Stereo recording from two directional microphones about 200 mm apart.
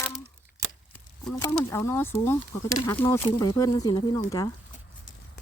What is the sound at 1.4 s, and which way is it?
Speech, 15° left (ahead or behind).